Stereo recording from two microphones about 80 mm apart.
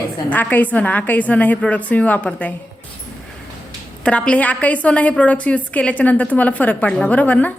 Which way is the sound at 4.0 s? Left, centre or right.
Centre.